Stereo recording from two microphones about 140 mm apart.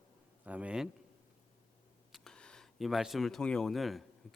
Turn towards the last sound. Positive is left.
turn(degrees=0)  # may be behind; listen again after turning